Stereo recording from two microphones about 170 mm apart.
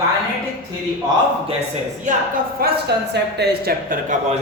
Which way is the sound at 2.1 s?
50° right (ahead or behind).